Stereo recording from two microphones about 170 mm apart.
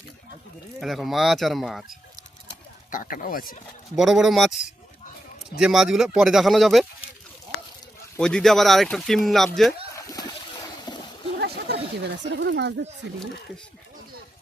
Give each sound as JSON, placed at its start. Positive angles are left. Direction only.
{"t": 0.8, "sound": "speech", "side_deg": 0}
{"t": 2.9, "sound": "speech", "side_deg": 55}
{"t": 3.9, "sound": "speech", "side_deg": 0}
{"t": 8.2, "sound": "speech", "side_deg": 5}
{"t": 9.9, "sound": "splash", "side_deg": 20}
{"t": 11.3, "sound": "speech", "side_deg": -70}